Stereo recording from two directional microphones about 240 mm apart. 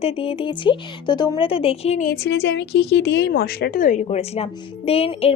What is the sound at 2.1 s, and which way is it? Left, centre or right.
A woman's voice, left.